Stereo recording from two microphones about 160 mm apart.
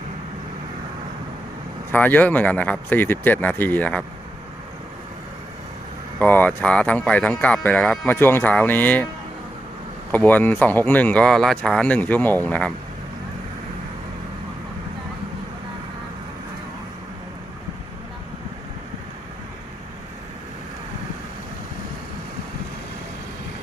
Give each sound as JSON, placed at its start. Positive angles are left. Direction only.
{"t": 1.9, "sound": "speech", "side_deg": 10}
{"t": 6.1, "sound": "speech", "side_deg": 10}
{"t": 10.1, "sound": "speech", "side_deg": 10}